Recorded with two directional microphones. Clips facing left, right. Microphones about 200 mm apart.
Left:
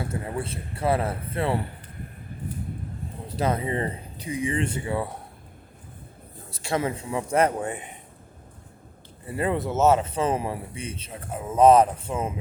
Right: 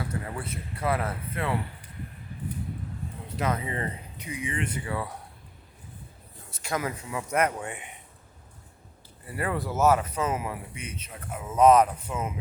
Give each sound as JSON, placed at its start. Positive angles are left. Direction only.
{"t": 0.0, "sound": "speech", "side_deg": 25}
{"t": 3.2, "sound": "speech", "side_deg": 30}
{"t": 6.5, "sound": "speech", "side_deg": 30}
{"t": 9.2, "sound": "speech", "side_deg": 25}